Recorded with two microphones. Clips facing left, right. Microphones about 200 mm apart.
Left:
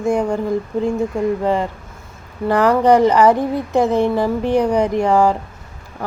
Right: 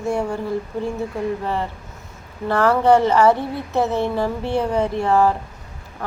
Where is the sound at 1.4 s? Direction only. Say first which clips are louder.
Left 6 dB; 15° left (ahead or behind).